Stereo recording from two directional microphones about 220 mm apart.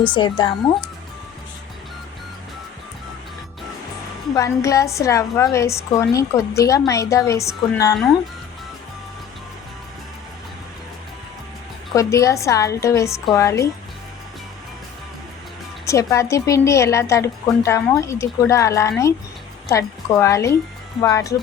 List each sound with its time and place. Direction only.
0.0 s speech: 20° left (ahead or behind)
4.4 s a woman's voice: 15° left (ahead or behind)
11.9 s a woman's voice: 15° left (ahead or behind)
15.9 s a woman's voice: 15° left (ahead or behind)